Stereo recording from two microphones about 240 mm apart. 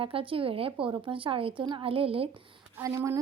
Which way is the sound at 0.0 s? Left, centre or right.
Right.